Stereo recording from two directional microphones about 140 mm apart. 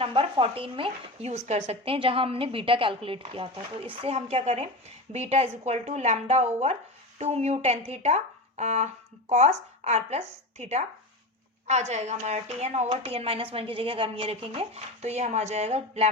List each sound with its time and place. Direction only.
0.0 s a woman's voice: 40° right (ahead or behind)